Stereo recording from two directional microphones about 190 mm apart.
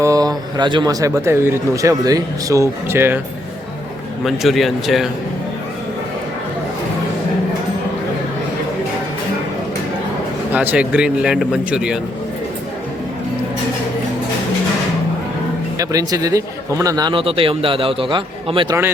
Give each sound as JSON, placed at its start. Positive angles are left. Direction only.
{"t": 0.0, "sound": "a man's voice", "side_deg": -20}
{"t": 4.2, "sound": "speech", "side_deg": 0}
{"t": 10.5, "sound": "speech", "side_deg": -10}
{"t": 15.8, "sound": "a man's voice", "side_deg": -20}